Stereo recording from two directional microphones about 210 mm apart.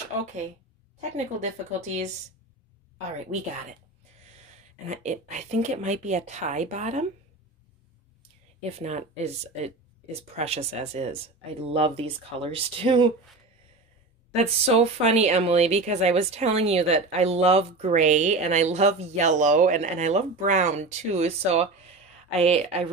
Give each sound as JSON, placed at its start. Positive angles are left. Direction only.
{"t": 0.2, "sound": "speech", "side_deg": -35}
{"t": 4.8, "sound": "speech", "side_deg": -35}
{"t": 8.7, "sound": "speech", "side_deg": -30}
{"t": 10.3, "sound": "speech", "side_deg": -30}
{"t": 14.3, "sound": "speech", "side_deg": -30}